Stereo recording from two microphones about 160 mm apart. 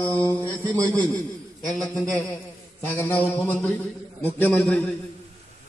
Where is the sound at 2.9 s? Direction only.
10° left (ahead or behind).